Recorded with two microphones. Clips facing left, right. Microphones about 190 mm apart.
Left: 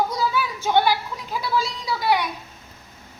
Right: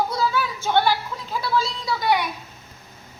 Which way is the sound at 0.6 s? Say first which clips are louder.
Left 1 dB; 15° left (ahead or behind).